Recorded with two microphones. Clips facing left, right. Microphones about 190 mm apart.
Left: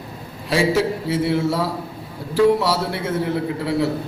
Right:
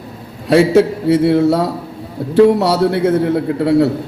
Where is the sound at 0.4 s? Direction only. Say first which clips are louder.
Right 8 dB; 65° right (ahead or behind).